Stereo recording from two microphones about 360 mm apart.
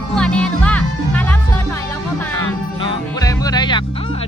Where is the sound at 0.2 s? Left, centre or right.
Centre.